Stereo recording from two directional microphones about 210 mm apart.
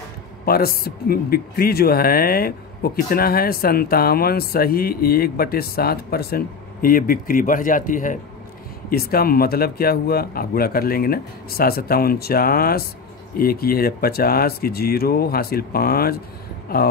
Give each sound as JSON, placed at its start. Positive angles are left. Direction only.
{"t": 0.5, "sound": "speech", "side_deg": 45}